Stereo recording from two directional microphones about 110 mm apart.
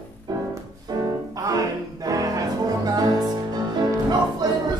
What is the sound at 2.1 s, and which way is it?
Music, 30° right (ahead or behind).